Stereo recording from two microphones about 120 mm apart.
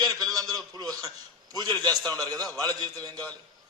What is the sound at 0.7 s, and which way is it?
A man's voice, 30° right (ahead or behind).